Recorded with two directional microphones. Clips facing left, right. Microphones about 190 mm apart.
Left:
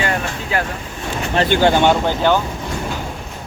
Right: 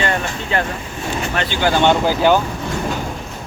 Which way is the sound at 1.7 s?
10° left (ahead or behind).